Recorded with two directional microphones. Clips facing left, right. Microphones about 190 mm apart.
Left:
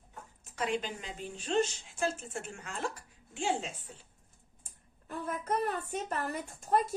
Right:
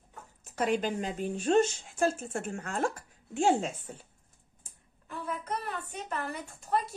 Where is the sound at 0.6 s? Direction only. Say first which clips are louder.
Right 5 dB; 45° right (ahead or behind).